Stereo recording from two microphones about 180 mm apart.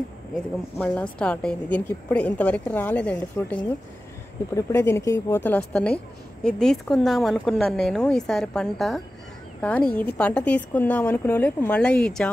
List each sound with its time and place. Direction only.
0.7 s a woman's voice: 5° left (ahead or behind)